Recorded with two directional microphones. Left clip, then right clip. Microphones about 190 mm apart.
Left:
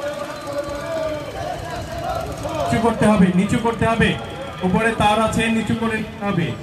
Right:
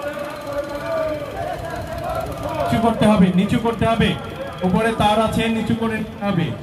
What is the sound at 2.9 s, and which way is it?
A man's voice, 55° right (ahead or behind).